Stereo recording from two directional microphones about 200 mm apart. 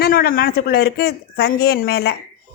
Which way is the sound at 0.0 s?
50° left (ahead or behind).